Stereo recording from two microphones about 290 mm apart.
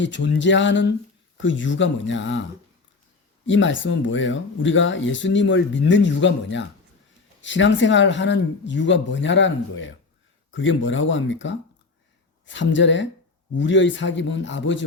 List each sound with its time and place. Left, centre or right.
0.0 s speech: left